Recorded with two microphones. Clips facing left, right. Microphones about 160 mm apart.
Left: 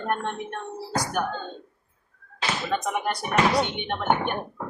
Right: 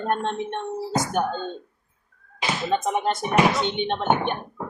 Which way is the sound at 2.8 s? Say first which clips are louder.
Right 4 dB; 25° right (ahead or behind).